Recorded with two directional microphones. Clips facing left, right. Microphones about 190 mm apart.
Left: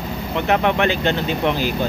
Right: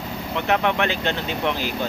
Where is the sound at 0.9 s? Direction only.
5° left (ahead or behind).